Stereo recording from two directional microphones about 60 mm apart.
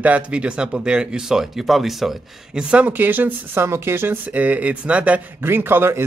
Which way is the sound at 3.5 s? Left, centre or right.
Right.